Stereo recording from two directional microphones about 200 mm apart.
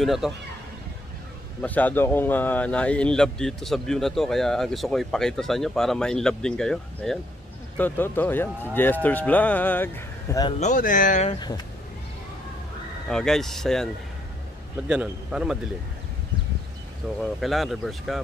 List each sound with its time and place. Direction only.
0.0 s speech: centre (ahead or behind)
1.6 s speech: 10° left (ahead or behind)
10.6 s speech: 40° left (ahead or behind)
11.3 s speech: 20° left (ahead or behind)
13.1 s speech: centre (ahead or behind)
14.9 s speech: 5° right (ahead or behind)
17.2 s speech: centre (ahead or behind)